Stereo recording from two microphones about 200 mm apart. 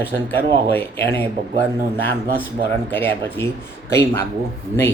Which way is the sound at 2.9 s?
10° left (ahead or behind).